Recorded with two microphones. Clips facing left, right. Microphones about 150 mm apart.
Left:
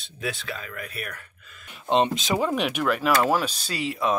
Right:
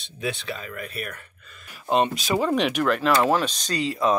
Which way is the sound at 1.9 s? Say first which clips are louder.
Even; 25° left (ahead or behind).